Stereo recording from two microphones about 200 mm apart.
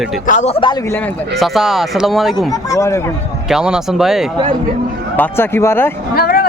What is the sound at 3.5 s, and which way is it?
Speech, 5° right (ahead or behind).